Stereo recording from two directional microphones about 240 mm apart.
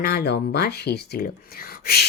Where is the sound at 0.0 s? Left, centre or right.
Left.